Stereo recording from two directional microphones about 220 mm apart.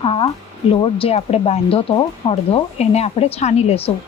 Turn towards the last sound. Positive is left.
turn(degrees=25)  # may be behind; listen again after turning